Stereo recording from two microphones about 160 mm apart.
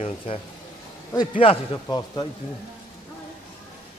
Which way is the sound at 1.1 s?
30° left (ahead or behind).